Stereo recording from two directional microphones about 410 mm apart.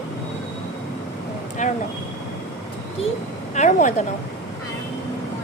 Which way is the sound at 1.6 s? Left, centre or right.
Centre.